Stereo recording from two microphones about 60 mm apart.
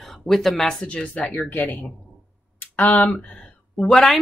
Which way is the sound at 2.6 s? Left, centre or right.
Left.